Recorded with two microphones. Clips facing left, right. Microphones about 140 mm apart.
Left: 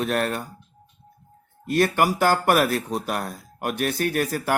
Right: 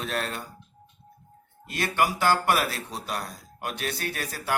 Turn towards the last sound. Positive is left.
turn(degrees=50)  # may be behind; listen again after turning